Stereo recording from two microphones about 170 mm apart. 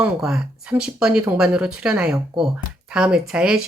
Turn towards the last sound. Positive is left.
turn(degrees=-5)  # may be behind; listen again after turning